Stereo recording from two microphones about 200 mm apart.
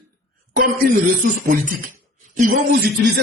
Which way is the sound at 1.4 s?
45° right (ahead or behind).